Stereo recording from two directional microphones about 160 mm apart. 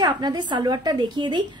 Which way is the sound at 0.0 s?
25° right (ahead or behind).